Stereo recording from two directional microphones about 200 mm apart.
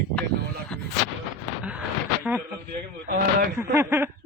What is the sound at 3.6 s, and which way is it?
Speech, 10° right (ahead or behind).